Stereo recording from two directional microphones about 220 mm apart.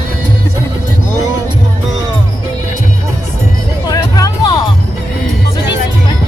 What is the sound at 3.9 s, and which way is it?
Music, 15° left (ahead or behind).